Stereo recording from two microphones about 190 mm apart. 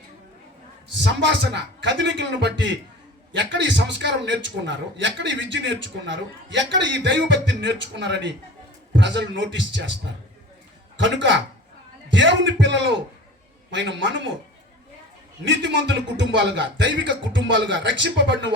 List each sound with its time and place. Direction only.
0.9 s a man's voice: 70° right (ahead or behind)
10.9 s a man's voice: 70° right (ahead or behind)
15.4 s a man's voice: 65° right (ahead or behind)